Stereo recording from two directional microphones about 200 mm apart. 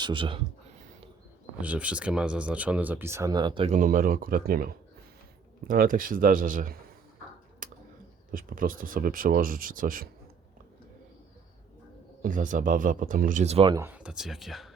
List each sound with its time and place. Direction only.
0.0 s speech: 25° right (ahead or behind)
1.6 s speech: 5° right (ahead or behind); by 3.8 s 25° right (ahead or behind)
3.8 s speech: 40° right (ahead or behind)
7.6 s a sound: 40° right (ahead or behind)
8.3 s speech: 45° right (ahead or behind)
12.2 s speech: 40° right (ahead or behind)
13.7 s speech: 10° right (ahead or behind)